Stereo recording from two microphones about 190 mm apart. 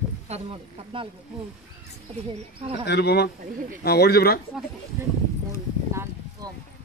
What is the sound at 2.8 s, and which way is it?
Speech, 60° left (ahead or behind).